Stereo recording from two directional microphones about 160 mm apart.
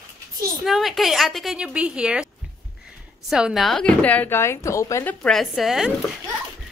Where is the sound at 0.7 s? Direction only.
Centre (ahead or behind).